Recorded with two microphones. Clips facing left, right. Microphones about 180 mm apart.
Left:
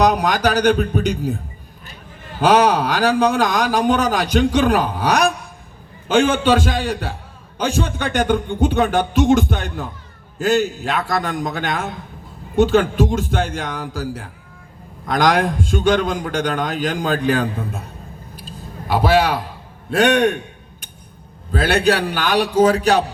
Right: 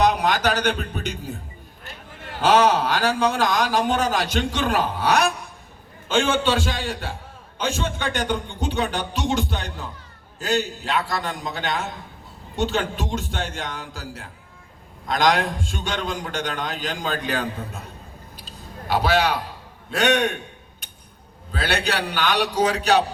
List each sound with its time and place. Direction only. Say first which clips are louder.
0.0 s a man's voice: left 4 dB; 45° left (ahead or behind)
2.4 s a man's voice: left 3 dB; 40° left (ahead or behind)
6.3 s a man's voice: left 5 dB; 45° left (ahead or behind)
18.4 s a sound: left 3 dB; 50° left (ahead or behind)
19.9 s a man's voice: left 6 dB; 55° left (ahead or behind)
21.5 s a man's voice: left 8 dB; 50° left (ahead or behind)